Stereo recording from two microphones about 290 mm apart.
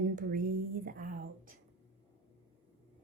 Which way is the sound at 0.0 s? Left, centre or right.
Right.